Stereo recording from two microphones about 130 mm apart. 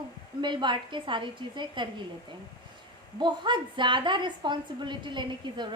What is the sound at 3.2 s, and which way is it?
A woman's voice, 35° right (ahead or behind).